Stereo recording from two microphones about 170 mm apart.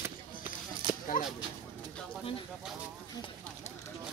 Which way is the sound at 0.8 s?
30° right (ahead or behind).